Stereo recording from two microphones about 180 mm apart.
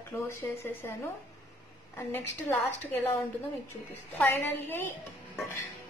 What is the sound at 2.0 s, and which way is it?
Speech, 15° left (ahead or behind).